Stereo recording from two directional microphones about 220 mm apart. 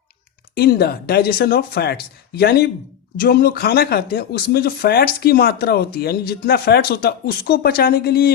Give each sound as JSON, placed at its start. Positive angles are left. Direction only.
{"t": 0.5, "sound": "speech", "side_deg": 45}